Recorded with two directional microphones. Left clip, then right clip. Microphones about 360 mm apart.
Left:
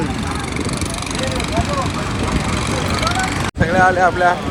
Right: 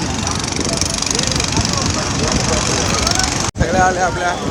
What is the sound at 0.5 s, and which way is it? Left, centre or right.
Vehicle, centre.